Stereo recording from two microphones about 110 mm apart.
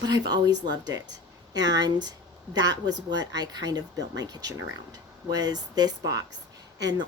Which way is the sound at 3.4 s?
35° right (ahead or behind).